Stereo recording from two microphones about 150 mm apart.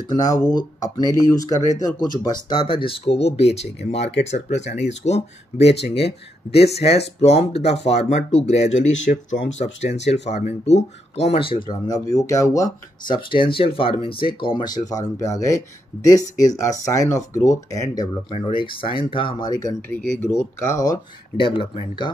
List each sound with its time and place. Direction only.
0.1 s speech: 25° left (ahead or behind)
16.8 s speech: 20° left (ahead or behind)
19.9 s speech: 10° left (ahead or behind); by 22.1 s 30° left (ahead or behind)